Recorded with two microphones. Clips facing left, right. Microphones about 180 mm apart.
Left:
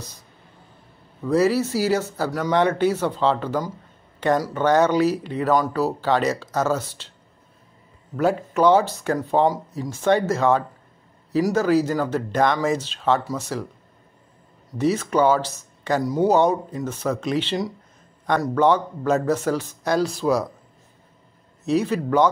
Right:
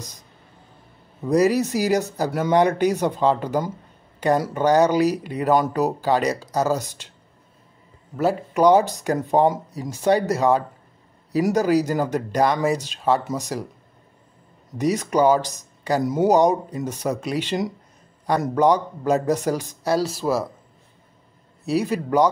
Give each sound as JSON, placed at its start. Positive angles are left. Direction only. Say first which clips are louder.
{"t": 1.2, "sound": "speech", "louder": "right 1 dB", "side_deg": -15}
{"t": 8.5, "sound": "speech", "louder": "right 2 dB", "side_deg": -15}
{"t": 14.8, "sound": "speech", "louder": "even", "side_deg": -15}
{"t": 21.6, "sound": "speech", "louder": "left 1 dB", "side_deg": -10}